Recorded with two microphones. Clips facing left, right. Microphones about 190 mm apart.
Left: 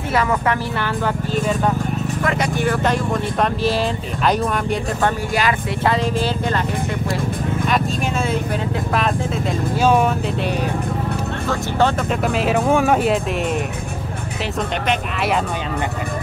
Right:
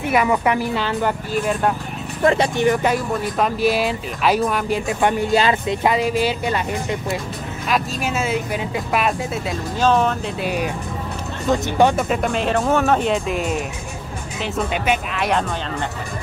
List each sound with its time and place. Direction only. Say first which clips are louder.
0.1 s speech: right 1 dB; 15° right (ahead or behind)
2.2 s speech: right 6 dB; 25° right (ahead or behind); by 4.7 s 5° right (ahead or behind)
5.0 s speech: right 4 dB; 25° right (ahead or behind)
5.9 s speech: right 1 dB; 10° right (ahead or behind)
7.6 s speech: right 1 dB; 5° right (ahead or behind)
9.8 s speech: left 1 dB; 10° left (ahead or behind)
11.4 s speech: right 3 dB; 20° right (ahead or behind)
12.1 s speech: left 1 dB; 5° left (ahead or behind)